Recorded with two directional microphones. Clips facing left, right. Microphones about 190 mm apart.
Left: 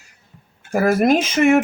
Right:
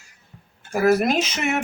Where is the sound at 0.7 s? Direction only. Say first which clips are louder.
Left 3 dB; 50° left (ahead or behind).